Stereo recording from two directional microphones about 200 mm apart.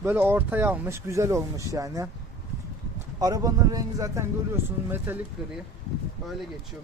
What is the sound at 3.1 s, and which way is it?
Speech, 20° right (ahead or behind).